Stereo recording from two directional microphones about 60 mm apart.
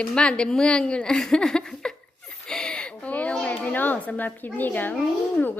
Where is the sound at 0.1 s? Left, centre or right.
Centre.